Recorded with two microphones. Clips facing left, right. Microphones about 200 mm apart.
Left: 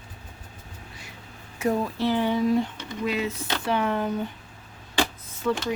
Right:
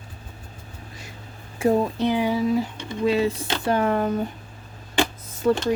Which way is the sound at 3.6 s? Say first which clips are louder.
Right 4 dB; 45° right (ahead or behind).